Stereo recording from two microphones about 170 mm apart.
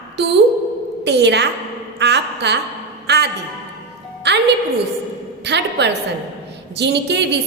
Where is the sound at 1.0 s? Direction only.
90° right.